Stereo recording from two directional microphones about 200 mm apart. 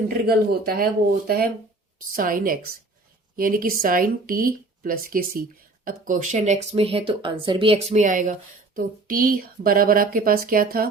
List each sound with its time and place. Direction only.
0.1 s speech: 50° right (ahead or behind)
2.0 s speech: 45° right (ahead or behind)